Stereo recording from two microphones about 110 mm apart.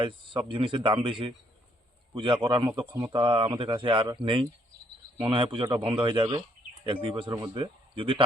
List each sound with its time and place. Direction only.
0.0 s speech: 50° right (ahead or behind)